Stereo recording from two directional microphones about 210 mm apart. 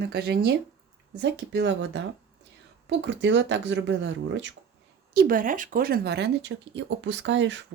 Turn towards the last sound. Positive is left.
turn(degrees=-60)  # may be behind; listen again after turning